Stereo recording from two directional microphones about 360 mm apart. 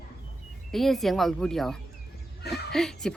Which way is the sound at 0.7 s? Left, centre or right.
Centre.